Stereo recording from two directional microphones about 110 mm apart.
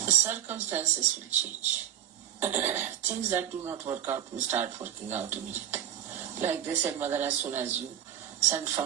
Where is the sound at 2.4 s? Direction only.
20° right (ahead or behind).